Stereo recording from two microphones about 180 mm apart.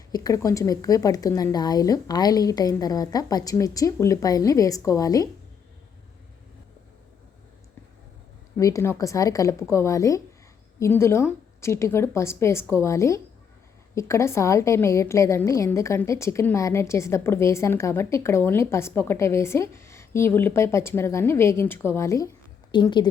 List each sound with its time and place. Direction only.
0.1 s a woman's voice: 20° left (ahead or behind)
8.5 s a woman's voice: 15° left (ahead or behind)